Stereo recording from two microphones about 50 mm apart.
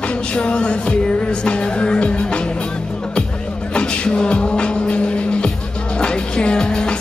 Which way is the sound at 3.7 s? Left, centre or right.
Left.